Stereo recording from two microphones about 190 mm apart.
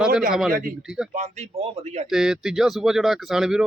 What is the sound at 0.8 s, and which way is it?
Speech, 5° right (ahead or behind).